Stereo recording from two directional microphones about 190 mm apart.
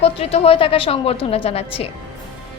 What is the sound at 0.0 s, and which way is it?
A woman's voice, 30° left (ahead or behind).